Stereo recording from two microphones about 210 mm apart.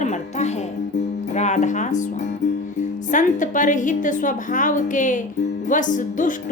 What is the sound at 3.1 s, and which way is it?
A woman's voice, 35° left (ahead or behind).